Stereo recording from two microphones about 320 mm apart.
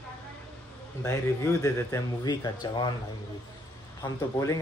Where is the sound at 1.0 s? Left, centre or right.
Centre.